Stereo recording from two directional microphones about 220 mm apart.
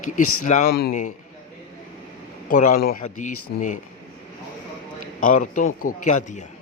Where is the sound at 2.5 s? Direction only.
35° left (ahead or behind).